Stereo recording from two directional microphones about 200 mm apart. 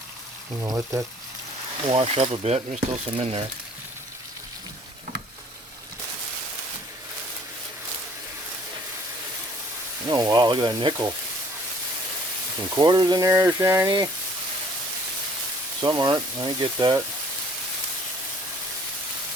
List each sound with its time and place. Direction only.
0.6 s speech: 15° right (ahead or behind)
1.8 s speech: 30° right (ahead or behind)
10.1 s speech: 20° right (ahead or behind)
12.7 s speech: 20° right (ahead or behind)
15.8 s speech: 20° right (ahead or behind)